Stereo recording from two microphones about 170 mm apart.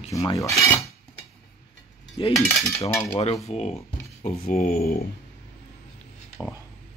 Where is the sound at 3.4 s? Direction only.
40° left (ahead or behind); by 5.0 s 55° left (ahead or behind).